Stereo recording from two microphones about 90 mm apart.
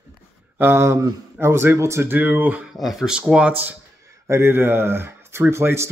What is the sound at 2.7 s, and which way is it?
Speech, 5° right (ahead or behind).